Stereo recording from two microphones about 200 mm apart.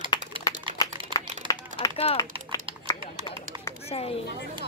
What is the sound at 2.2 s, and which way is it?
Typing, 15° left (ahead or behind).